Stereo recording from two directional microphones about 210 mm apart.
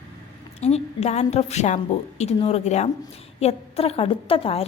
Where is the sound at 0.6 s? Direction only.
30° left (ahead or behind).